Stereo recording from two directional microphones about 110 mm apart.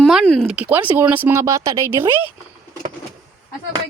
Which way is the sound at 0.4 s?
15° right (ahead or behind).